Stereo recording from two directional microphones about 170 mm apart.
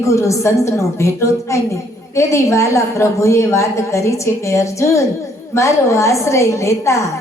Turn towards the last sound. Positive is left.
turn(degrees=15)  # may be behind; listen again after turning